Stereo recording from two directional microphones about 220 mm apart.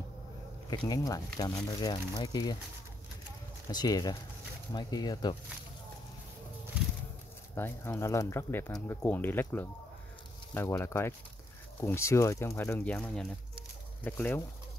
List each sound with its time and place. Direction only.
0.7 s speech: 15° left (ahead or behind)
3.7 s speech: 15° left (ahead or behind)
7.5 s speech: 10° left (ahead or behind)